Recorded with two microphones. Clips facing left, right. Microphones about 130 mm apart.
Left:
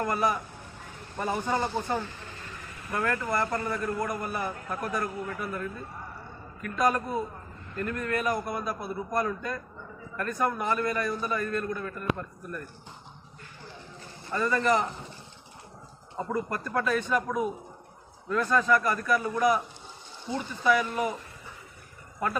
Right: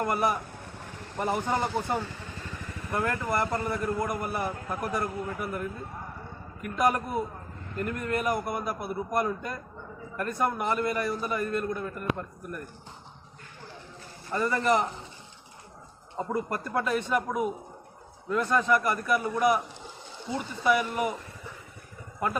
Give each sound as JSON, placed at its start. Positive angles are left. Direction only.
{"t": 0.0, "sound": "a man's voice", "side_deg": -20}
{"t": 1.1, "sound": "a man's voice", "side_deg": -10}
{"t": 14.3, "sound": "a man's voice", "side_deg": -20}
{"t": 16.1, "sound": "a man's voice", "side_deg": -25}
{"t": 17.2, "sound": "a man's voice", "side_deg": -10}